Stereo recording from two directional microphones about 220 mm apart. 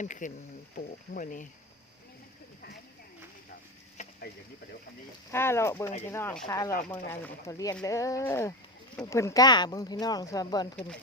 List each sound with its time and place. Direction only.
0.0 s speech: 35° left (ahead or behind)
5.3 s speech: 10° left (ahead or behind)